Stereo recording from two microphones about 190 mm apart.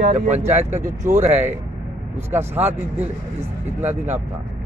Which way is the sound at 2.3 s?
10° right (ahead or behind).